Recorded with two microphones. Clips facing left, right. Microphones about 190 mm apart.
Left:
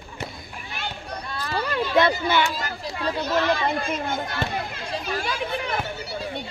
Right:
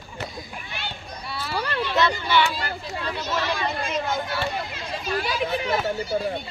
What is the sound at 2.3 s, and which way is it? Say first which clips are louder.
Children playing: right 1 dB; 45° left (ahead or behind).